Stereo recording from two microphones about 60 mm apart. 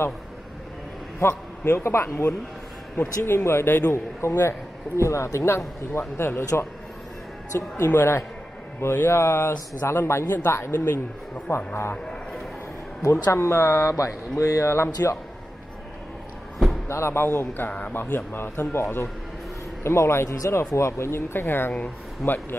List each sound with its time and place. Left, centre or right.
1.2 s a man's voice: left
7.5 s a man's voice: left
12.1 s a sound: centre
13.0 s a man's voice: left
13.8 s speech: left
15.0 s a man's voice: left
16.8 s a man's voice: left
17.6 s speech: left
18.1 s a man's voice: left
20.2 s speech: left